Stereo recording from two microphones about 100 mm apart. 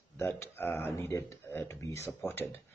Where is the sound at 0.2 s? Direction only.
25° left (ahead or behind).